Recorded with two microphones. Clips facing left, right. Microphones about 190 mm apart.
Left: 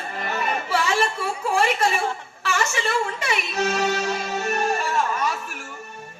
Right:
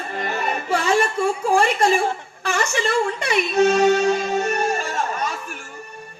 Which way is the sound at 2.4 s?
40° right (ahead or behind).